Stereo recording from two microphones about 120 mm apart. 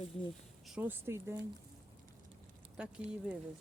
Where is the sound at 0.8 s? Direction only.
20° right (ahead or behind).